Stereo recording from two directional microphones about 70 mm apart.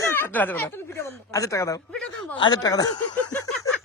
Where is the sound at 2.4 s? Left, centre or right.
Left.